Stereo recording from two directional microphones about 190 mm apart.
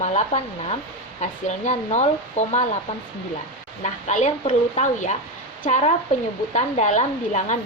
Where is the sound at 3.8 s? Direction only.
35° left (ahead or behind).